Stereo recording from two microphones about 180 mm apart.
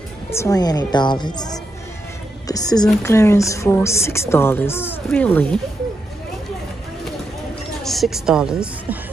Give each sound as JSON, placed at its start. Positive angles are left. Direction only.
{"t": 0.3, "sound": "a woman's voice", "side_deg": 15}
{"t": 7.8, "sound": "a woman's voice", "side_deg": 0}